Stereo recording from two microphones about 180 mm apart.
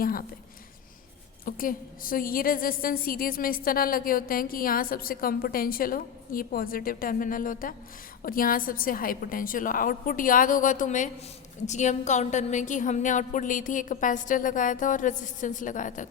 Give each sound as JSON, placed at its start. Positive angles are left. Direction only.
{"t": 0.0, "sound": "a woman's voice", "side_deg": 55}
{"t": 1.5, "sound": "a woman's voice", "side_deg": 50}